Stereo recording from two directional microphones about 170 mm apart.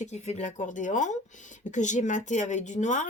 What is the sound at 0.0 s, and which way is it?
Speech, 40° left (ahead or behind).